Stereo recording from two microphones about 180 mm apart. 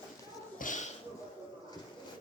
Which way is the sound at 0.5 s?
45° left (ahead or behind).